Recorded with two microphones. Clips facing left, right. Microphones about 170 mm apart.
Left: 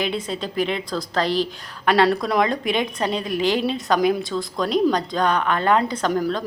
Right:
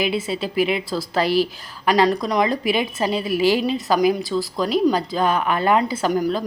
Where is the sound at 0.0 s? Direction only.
5° right (ahead or behind).